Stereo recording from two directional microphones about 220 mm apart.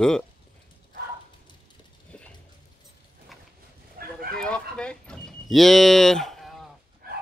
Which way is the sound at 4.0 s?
45° right (ahead or behind).